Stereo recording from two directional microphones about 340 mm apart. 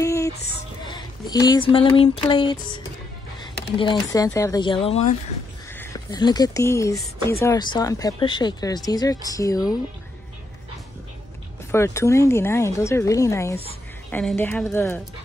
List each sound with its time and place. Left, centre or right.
0.0 s music: centre
0.8 s a sound: centre
3.3 s speech: centre
11.7 s speech: centre